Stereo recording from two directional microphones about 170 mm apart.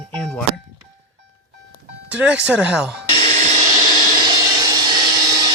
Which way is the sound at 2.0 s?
5° right (ahead or behind).